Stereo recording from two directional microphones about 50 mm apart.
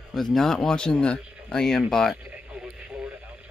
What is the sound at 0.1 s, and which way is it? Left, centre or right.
Speech, centre.